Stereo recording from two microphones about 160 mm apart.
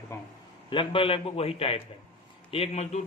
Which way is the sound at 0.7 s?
30° left (ahead or behind).